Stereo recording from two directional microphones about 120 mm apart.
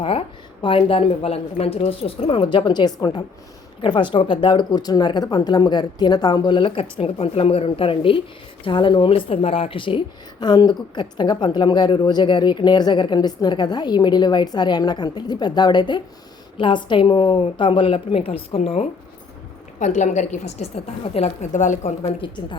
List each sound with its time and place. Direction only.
0.0 s a woman's voice: 55° left (ahead or behind)
10.4 s a woman's voice: 35° left (ahead or behind); by 18.9 s 55° left (ahead or behind)
19.8 s a woman's voice: 90° left
22.2 s a woman's voice: 45° left (ahead or behind)